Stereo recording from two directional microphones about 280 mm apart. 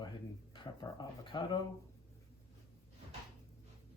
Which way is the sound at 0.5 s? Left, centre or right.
Centre.